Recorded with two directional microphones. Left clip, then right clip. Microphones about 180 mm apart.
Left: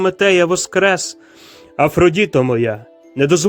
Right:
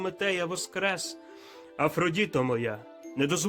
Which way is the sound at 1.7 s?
30° left (ahead or behind).